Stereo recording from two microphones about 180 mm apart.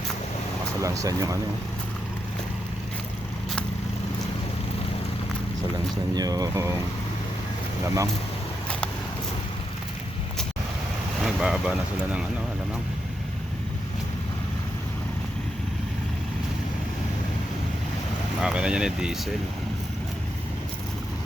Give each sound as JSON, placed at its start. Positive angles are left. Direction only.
{"t": 0.8, "sound": "speech", "side_deg": -15}
{"t": 6.1, "sound": "speech", "side_deg": -20}
{"t": 11.2, "sound": "boat", "side_deg": -5}
{"t": 18.4, "sound": "speech", "side_deg": -5}